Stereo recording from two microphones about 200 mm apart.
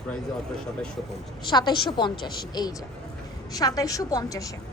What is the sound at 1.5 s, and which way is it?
A woman's voice, 20° left (ahead or behind).